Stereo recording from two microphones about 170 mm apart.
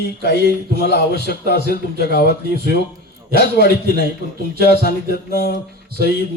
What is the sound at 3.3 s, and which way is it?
Speech, 60° right (ahead or behind).